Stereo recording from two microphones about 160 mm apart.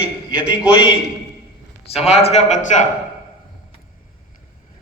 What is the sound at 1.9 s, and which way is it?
Speech, 40° left (ahead or behind).